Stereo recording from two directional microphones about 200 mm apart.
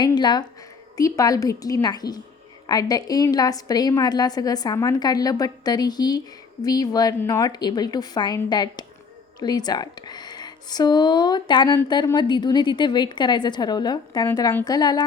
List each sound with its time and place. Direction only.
0.0 s a woman's voice: 20° left (ahead or behind)